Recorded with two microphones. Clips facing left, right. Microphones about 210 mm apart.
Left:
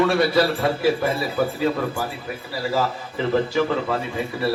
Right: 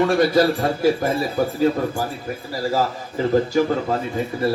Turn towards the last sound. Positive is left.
turn(degrees=-40)  # may be behind; listen again after turning